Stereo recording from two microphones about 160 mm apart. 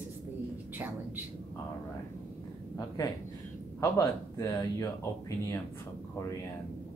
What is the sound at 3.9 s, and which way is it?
Speech, 20° left (ahead or behind).